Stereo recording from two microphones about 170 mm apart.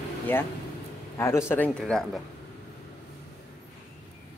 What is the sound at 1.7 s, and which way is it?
Speech, 5° left (ahead or behind).